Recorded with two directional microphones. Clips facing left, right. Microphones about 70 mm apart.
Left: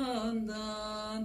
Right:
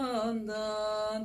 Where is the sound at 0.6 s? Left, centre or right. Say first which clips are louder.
Right 7 dB; right.